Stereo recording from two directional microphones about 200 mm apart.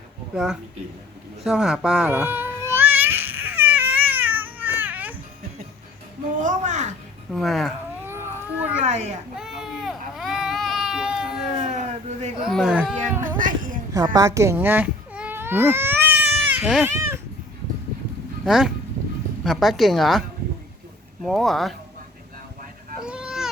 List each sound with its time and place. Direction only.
0.3 s a woman's voice: 5° right (ahead or behind)
1.5 s babbling: centre (ahead or behind)
6.4 s a woman's voice: 35° right (ahead or behind)
7.3 s a woman's voice: centre (ahead or behind)
8.0 s baby cry: 10° right (ahead or behind)
8.8 s a woman's voice: 35° right (ahead or behind)
9.3 s baby cry: 5° right (ahead or behind)
11.6 s a sound: 35° right (ahead or behind)
12.4 s a woman's voice: centre (ahead or behind)
13.2 s a woman's voice: 40° right (ahead or behind)
13.9 s baby cry: 20° right (ahead or behind)
18.4 s a woman's voice: 5° right (ahead or behind)
23.0 s a sound: 5° right (ahead or behind)